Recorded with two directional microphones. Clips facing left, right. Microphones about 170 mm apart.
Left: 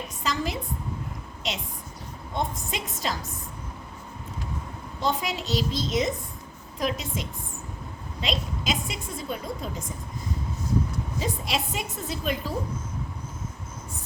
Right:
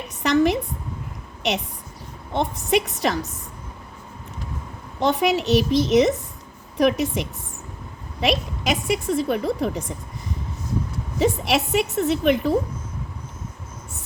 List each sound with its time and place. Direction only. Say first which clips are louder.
0.2 s a woman's voice: right 11 dB; 70° right (ahead or behind)
1.4 s a sound: right 9 dB; 70° right (ahead or behind)
2.3 s a woman's voice: right 9 dB; 70° right (ahead or behind)
5.0 s a woman's voice: right 8 dB; 70° right (ahead or behind)
11.2 s a woman's voice: right 10 dB; 70° right (ahead or behind)